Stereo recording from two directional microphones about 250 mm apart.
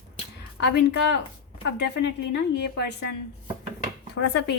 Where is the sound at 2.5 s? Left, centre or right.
Left.